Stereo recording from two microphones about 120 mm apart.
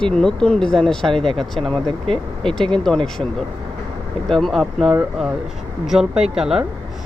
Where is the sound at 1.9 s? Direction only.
50° right (ahead or behind).